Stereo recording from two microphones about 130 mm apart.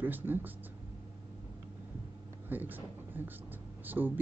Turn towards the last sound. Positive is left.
turn(degrees=-15)  # may be behind; listen again after turning